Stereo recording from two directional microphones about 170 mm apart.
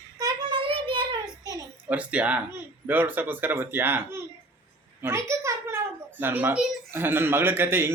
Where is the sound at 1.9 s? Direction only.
10° right (ahead or behind).